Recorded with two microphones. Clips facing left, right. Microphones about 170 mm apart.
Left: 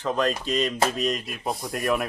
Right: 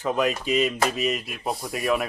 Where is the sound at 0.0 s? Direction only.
10° right (ahead or behind).